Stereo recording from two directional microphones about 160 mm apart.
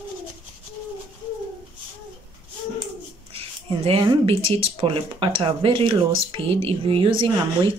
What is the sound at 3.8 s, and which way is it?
Speech, 35° right (ahead or behind).